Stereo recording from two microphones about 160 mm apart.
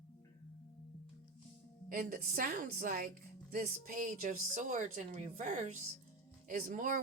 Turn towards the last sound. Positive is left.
turn(degrees=-55)  # may be behind; listen again after turning